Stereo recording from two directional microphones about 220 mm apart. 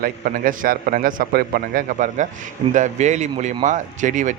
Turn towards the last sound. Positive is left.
turn(degrees=-35)  # may be behind; listen again after turning